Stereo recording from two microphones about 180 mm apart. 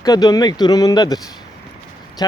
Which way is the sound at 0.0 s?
20° left (ahead or behind).